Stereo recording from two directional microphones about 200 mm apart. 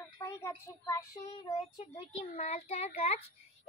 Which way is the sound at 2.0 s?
30° left (ahead or behind).